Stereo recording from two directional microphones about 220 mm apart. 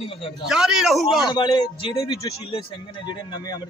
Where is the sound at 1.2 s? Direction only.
20° left (ahead or behind).